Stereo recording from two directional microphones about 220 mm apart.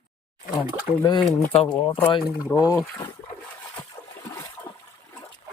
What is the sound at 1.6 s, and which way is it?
Speech, 25° left (ahead or behind).